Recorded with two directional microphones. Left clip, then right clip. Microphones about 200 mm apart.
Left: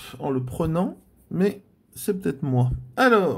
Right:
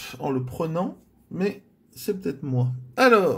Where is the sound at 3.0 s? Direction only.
10° left (ahead or behind).